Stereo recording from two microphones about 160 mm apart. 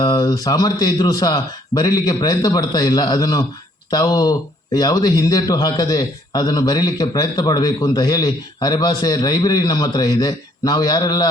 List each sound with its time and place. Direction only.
0.0 s speech: 25° left (ahead or behind)